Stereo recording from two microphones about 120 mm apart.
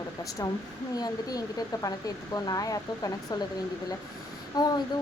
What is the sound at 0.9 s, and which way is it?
Speech, 30° left (ahead or behind).